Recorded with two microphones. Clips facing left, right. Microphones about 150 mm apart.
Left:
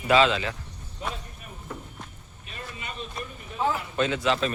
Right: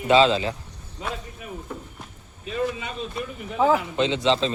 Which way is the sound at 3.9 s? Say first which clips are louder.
Right 3 dB; 20° right (ahead or behind).